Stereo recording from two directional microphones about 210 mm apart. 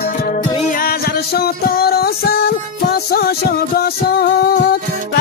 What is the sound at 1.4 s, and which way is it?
Music, 45° left (ahead or behind).